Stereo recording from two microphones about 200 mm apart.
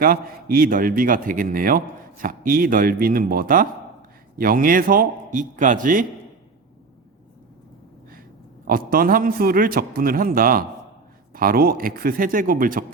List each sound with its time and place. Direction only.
0.0 s a man's voice: 45° right (ahead or behind)
8.6 s a man's voice: 45° right (ahead or behind)